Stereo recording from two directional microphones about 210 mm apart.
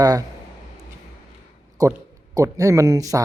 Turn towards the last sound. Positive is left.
turn(degrees=-15)  # may be behind; listen again after turning